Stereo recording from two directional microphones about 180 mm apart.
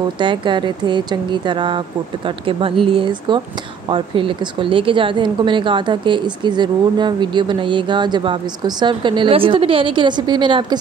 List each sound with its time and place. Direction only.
0.2 s speech: 25° right (ahead or behind)